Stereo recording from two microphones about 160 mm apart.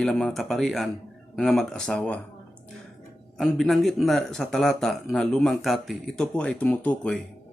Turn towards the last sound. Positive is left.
turn(degrees=5)  # may be behind; listen again after turning